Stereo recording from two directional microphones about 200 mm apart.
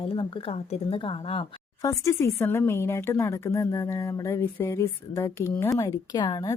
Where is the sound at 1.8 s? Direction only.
15° left (ahead or behind).